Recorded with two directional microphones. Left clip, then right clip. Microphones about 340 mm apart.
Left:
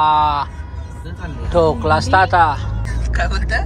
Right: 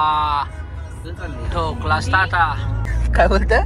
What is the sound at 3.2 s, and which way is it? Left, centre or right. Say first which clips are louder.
Speech: right 6 dB; centre.